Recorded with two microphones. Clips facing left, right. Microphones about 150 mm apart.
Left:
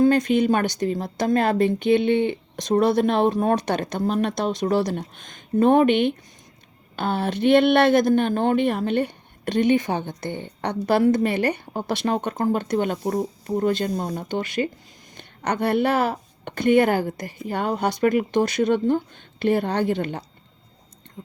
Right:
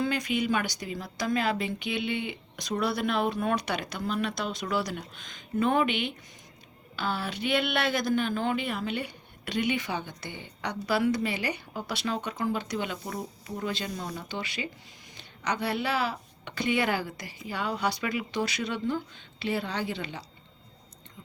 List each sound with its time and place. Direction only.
0.0 s speech: 50° left (ahead or behind)